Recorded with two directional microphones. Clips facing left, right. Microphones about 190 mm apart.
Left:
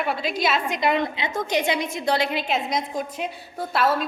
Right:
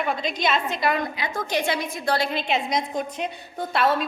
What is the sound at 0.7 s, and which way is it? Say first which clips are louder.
A woman's voice: left 2 dB; 20° left (ahead or behind).